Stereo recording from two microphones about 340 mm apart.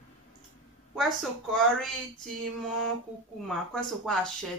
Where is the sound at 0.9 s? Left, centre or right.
Centre.